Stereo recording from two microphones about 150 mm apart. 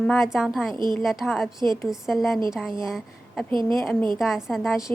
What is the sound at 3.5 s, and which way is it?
Speech, 30° right (ahead or behind).